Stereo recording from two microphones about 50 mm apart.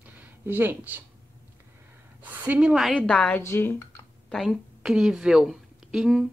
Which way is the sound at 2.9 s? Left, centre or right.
Centre.